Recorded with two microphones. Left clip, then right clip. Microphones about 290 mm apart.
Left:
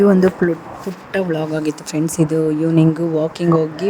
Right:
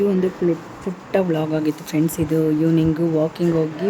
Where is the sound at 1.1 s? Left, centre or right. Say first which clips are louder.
Even; centre.